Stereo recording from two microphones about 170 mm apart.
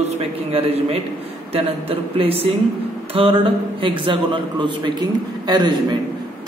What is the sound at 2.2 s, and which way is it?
A man's voice, 35° right (ahead or behind).